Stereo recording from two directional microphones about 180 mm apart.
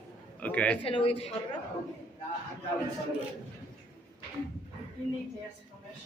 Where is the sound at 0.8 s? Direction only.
30° left (ahead or behind).